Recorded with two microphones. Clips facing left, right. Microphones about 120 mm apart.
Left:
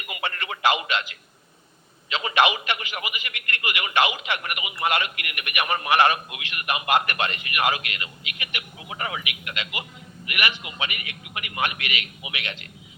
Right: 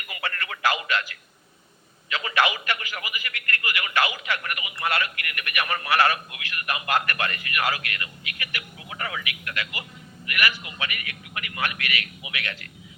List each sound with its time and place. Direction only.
0.1 s radio: 25° left (ahead or behind)
2.0 s speech: 20° left (ahead or behind)